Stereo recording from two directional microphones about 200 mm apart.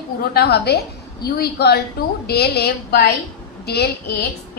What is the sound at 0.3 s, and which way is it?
A woman's voice, 50° left (ahead or behind).